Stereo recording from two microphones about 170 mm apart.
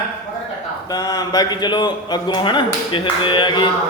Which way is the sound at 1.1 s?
25° left (ahead or behind).